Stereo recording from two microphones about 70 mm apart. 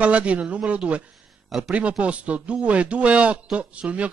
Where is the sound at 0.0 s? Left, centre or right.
Centre.